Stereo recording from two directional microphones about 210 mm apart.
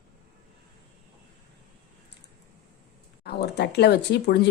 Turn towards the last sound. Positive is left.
turn(degrees=50)  # may be behind; listen again after turning